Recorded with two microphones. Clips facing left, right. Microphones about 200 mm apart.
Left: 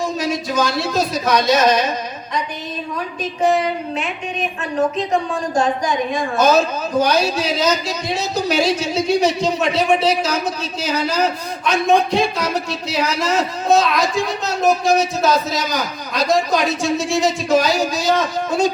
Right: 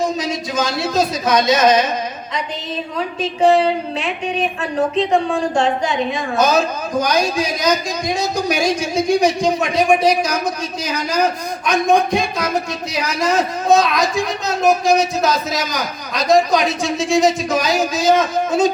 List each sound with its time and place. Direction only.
0.0 s speech: 20° right (ahead or behind)
3.2 s a woman's voice: 30° right (ahead or behind)
7.0 s a man's voice: 15° right (ahead or behind)
11.7 s a man's voice: 15° right (ahead or behind)